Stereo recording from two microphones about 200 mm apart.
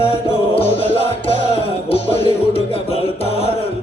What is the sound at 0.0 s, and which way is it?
Music, 30° left (ahead or behind).